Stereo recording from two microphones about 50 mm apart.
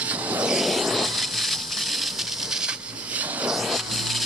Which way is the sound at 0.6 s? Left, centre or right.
Centre.